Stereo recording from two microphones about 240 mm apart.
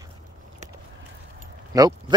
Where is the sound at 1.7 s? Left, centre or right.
Centre.